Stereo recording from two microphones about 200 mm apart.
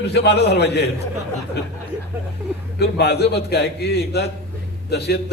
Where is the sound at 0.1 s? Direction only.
55° left (ahead or behind).